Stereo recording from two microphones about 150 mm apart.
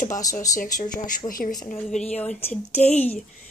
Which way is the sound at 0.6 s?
65° left (ahead or behind).